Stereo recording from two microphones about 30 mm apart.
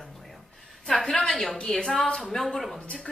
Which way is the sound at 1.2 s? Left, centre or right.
Left.